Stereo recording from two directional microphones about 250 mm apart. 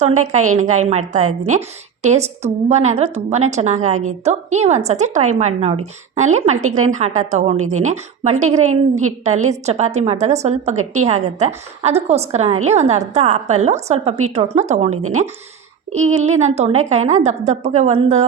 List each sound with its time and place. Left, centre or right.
0.2 s a woman's voice: right
8.7 s a woman's voice: right
9.2 s a woman's voice: right